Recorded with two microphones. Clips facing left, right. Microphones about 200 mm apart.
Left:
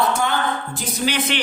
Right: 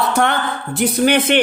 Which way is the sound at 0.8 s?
55° right (ahead or behind).